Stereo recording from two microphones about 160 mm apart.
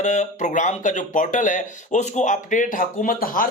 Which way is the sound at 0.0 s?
50° left (ahead or behind).